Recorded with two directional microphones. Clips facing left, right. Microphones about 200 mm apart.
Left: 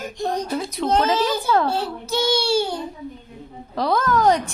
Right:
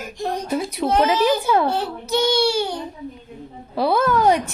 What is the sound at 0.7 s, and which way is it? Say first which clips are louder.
Speech: right 1 dB; 10° right (ahead or behind).